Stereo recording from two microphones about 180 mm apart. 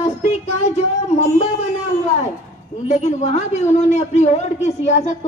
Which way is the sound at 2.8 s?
40° left (ahead or behind).